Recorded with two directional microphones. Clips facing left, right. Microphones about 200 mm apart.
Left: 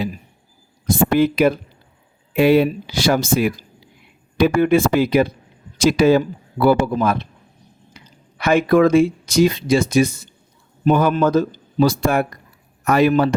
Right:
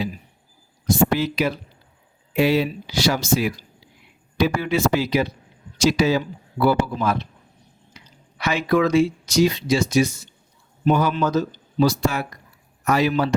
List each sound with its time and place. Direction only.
0.9 s speech: 55° left (ahead or behind)